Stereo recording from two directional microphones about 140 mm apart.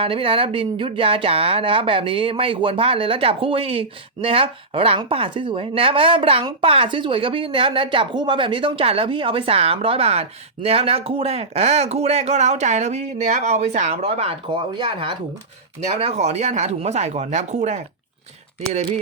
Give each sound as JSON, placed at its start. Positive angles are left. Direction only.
{"t": 0.0, "sound": "speech", "side_deg": -40}